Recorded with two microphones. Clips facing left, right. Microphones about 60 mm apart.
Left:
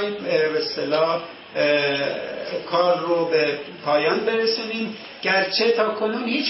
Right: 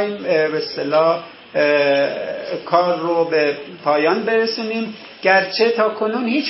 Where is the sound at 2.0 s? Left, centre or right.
Centre.